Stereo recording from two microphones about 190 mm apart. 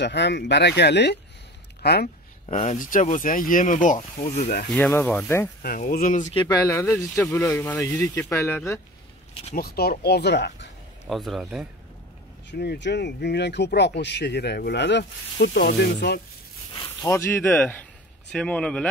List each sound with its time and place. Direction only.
0.0 s speech: 65° left (ahead or behind)
2.4 s speech: 35° left (ahead or behind); by 4.6 s 50° left (ahead or behind)
4.7 s speech: 10° left (ahead or behind)
5.6 s speech: 45° left (ahead or behind)
6.3 s speech: 20° left (ahead or behind)
9.3 s speech: 35° left (ahead or behind)
9.6 s speech: 55° left (ahead or behind)
11.1 s a man's voice: centre (ahead or behind)
12.4 s speech: 65° left (ahead or behind)
17.0 s a man's voice: 15° left (ahead or behind)